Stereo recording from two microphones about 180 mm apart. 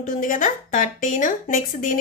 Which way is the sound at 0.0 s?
45° left (ahead or behind).